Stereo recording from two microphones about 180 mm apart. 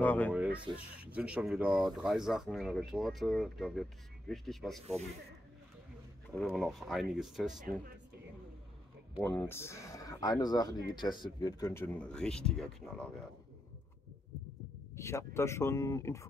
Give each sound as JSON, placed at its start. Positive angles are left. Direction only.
{"t": 0.0, "sound": "speech", "side_deg": 10}
{"t": 0.3, "sound": "speech", "side_deg": -5}
{"t": 6.4, "sound": "speech", "side_deg": 0}
{"t": 9.2, "sound": "speech", "side_deg": 15}
{"t": 15.0, "sound": "speech", "side_deg": 15}